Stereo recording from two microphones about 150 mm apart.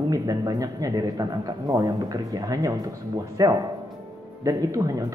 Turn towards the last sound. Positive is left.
turn(degrees=-20)  # may be behind; listen again after turning